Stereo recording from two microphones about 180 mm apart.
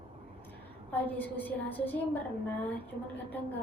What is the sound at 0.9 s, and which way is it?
Speech, 10° left (ahead or behind).